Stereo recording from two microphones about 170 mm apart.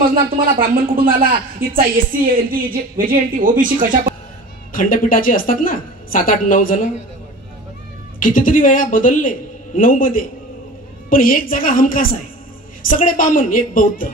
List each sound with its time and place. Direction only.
0.1 s speech: 55° right (ahead or behind)
4.7 s a woman's voice: 55° left (ahead or behind)
8.2 s a woman's voice: 50° left (ahead or behind)